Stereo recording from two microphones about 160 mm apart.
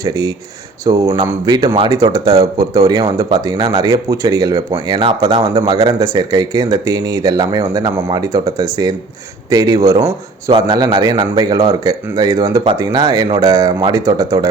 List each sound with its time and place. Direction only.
0.0 s speech: 20° right (ahead or behind)